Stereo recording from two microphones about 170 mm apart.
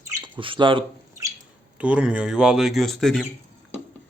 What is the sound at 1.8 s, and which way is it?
Speech, 5° right (ahead or behind).